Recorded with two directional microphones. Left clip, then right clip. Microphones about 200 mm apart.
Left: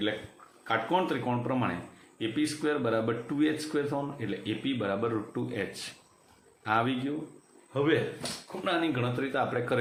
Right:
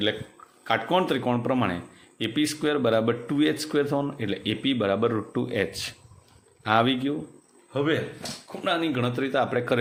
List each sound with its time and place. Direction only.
0.6 s speech: 50° right (ahead or behind)